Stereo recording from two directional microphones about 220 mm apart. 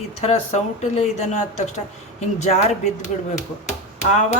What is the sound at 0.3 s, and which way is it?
Speech, 30° left (ahead or behind).